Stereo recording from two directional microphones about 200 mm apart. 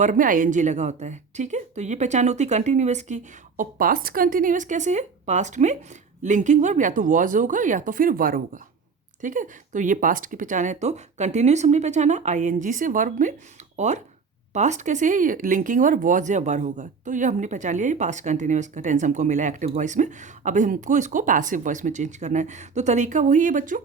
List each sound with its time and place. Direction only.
0.0 s speech: 40° right (ahead or behind)
3.6 s speech: 45° right (ahead or behind)